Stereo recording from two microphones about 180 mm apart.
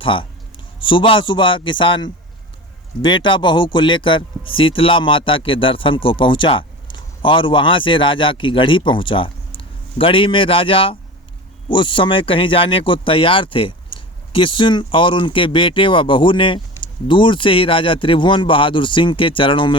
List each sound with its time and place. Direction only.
0.0 s a man's voice: 30° left (ahead or behind)